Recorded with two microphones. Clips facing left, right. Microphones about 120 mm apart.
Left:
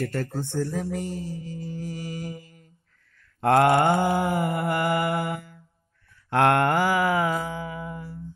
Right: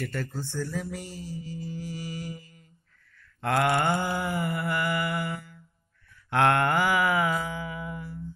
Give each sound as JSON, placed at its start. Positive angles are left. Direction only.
{"t": 0.0, "sound": "speech", "side_deg": 45}
{"t": 0.3, "sound": "speech", "side_deg": 55}
{"t": 0.6, "sound": "speech", "side_deg": 40}
{"t": 0.9, "sound": "mantra", "side_deg": 50}